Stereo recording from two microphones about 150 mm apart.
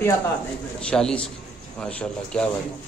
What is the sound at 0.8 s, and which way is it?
A man's voice, 5° left (ahead or behind).